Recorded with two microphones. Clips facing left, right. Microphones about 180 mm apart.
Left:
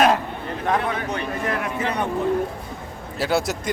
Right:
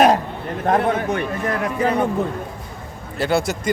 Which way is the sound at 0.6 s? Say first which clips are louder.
Right 5 dB; 45° right (ahead or behind).